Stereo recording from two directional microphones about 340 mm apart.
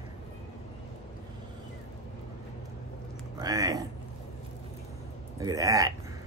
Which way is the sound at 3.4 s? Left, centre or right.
Centre.